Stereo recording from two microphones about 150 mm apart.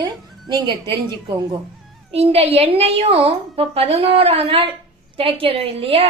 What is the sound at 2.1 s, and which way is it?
A woman's voice, 40° right (ahead or behind).